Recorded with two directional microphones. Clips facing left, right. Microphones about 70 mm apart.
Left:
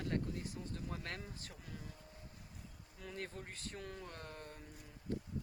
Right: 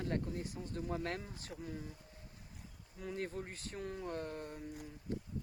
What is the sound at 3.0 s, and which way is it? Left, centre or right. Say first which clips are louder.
Speech: right 6 dB; right.